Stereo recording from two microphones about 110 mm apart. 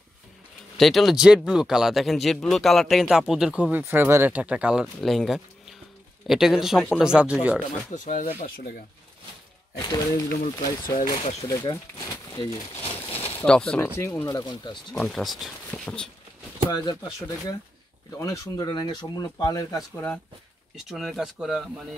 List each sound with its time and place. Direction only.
0.7 s speech: centre (ahead or behind)
3.8 s speech: 20° right (ahead or behind)
5.0 s speech: centre (ahead or behind)
9.8 s speech: 45° left (ahead or behind)
12.8 s a sound: 60° left (ahead or behind)
13.5 s speech: 10° left (ahead or behind)
13.7 s speech: 25° left (ahead or behind)
14.3 s speech: 40° left (ahead or behind)
15.0 s speech: centre (ahead or behind)
16.7 s speech: 40° left (ahead or behind)
18.1 s speech: 30° left (ahead or behind)
20.7 s speech: centre (ahead or behind)